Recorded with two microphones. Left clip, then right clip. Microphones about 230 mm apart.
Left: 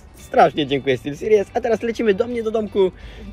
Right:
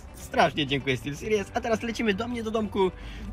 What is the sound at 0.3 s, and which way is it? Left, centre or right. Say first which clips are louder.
Speech: left 8 dB; centre.